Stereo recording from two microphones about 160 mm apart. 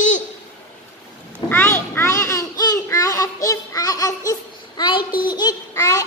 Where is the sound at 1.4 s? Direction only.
10° left (ahead or behind).